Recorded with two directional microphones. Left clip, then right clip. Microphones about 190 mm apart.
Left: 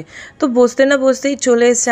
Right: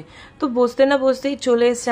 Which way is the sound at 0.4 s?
20° left (ahead or behind).